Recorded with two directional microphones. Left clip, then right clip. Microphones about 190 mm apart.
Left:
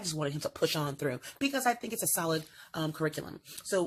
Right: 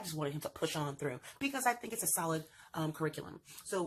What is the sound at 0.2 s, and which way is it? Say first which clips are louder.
Speech: left 6 dB; 35° left (ahead or behind).